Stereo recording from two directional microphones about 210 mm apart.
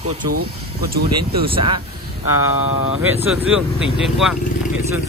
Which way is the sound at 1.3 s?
25° right (ahead or behind).